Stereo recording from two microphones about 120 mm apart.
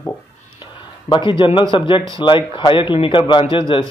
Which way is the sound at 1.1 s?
40° left (ahead or behind).